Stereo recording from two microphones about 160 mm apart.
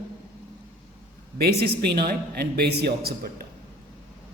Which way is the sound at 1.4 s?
80° right.